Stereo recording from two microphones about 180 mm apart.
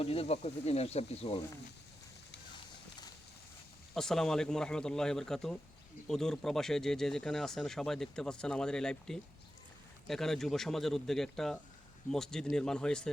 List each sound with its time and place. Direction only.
0.0 s speech: 35° left (ahead or behind)
3.9 s speech: 5° left (ahead or behind)